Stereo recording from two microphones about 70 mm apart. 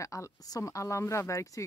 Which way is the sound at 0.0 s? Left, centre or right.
Left.